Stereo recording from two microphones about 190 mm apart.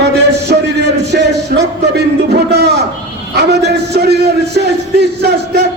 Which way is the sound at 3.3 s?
60° right (ahead or behind).